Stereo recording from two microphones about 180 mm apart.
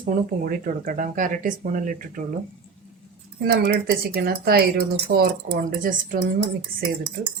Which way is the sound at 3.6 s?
60° right (ahead or behind).